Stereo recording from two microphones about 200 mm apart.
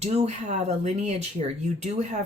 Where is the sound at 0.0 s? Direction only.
35° right (ahead or behind).